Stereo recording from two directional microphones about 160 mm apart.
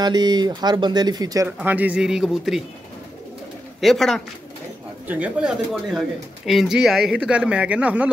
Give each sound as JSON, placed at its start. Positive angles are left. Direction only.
{"t": 0.0, "sound": "speech", "side_deg": -25}
{"t": 1.6, "sound": "a man's voice", "side_deg": -10}
{"t": 3.8, "sound": "a man's voice", "side_deg": 0}
{"t": 5.0, "sound": "speech", "side_deg": -10}